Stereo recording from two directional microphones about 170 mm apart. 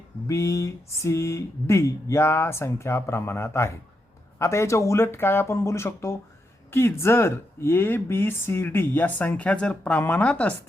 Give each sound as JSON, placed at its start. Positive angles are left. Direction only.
{"t": 0.3, "sound": "speech", "side_deg": 15}